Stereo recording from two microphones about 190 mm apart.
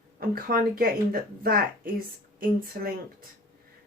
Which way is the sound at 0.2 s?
50° right (ahead or behind).